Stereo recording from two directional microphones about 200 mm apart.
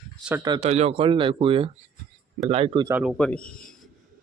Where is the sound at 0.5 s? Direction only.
35° right (ahead or behind).